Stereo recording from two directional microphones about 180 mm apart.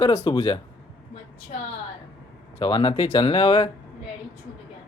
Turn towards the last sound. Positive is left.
turn(degrees=30)  # may be behind; listen again after turning